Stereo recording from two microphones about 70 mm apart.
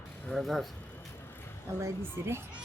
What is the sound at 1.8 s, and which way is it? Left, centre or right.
Speech, right.